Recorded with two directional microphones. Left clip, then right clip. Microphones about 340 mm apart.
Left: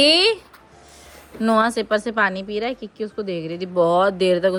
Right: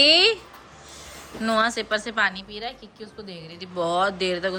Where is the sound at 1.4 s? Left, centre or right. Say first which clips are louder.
Left 4 dB; centre.